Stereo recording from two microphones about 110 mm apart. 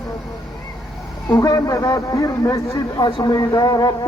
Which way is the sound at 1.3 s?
30° left (ahead or behind).